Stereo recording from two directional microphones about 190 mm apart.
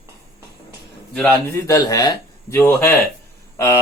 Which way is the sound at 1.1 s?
10° left (ahead or behind).